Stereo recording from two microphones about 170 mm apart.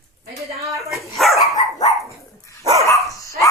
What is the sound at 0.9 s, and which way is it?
Speech, centre (ahead or behind).